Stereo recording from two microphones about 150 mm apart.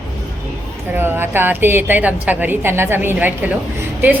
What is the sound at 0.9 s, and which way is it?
A woman's voice, 15° right (ahead or behind).